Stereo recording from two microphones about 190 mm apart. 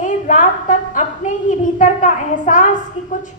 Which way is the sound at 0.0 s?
40° left (ahead or behind).